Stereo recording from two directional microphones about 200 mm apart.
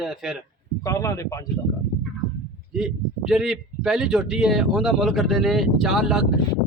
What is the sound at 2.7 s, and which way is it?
Speech, 5° right (ahead or behind).